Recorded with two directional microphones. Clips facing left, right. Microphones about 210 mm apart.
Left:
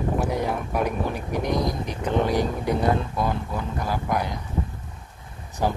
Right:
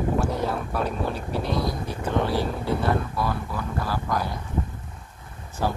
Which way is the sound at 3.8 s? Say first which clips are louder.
Left 2 dB; 20° left (ahead or behind).